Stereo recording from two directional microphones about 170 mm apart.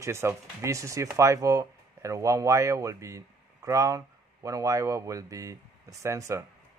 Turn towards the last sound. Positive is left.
turn(degrees=-20)  # may be behind; listen again after turning